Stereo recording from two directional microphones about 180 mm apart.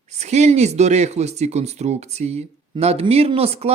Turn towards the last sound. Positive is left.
turn(degrees=-35)  # may be behind; listen again after turning